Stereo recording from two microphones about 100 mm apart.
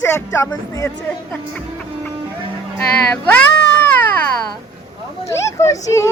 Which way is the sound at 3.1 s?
20° left (ahead or behind).